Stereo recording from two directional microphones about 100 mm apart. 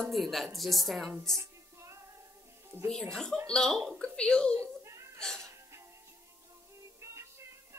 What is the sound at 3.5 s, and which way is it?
A woman's voice, 5° left (ahead or behind).